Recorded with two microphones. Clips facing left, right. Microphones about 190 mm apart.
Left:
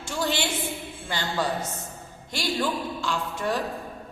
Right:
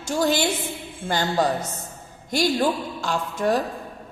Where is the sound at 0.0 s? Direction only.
40° right (ahead or behind).